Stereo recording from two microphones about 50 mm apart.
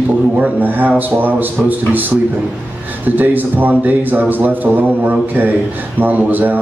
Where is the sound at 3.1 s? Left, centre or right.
Right.